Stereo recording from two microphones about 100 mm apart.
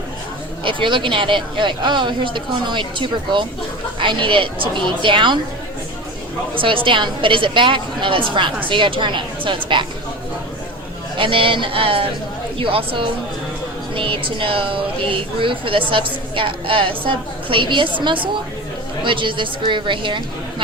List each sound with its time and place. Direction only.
0.6 s a woman's voice: 55° right (ahead or behind)
6.5 s a woman's voice: 60° right (ahead or behind)
11.2 s a woman's voice: 60° right (ahead or behind)